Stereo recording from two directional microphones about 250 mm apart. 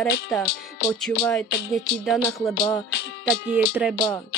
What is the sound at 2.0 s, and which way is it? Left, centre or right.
Speech, centre.